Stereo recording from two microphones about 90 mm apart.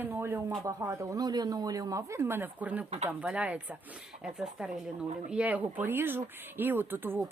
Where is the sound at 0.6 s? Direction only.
35° right (ahead or behind).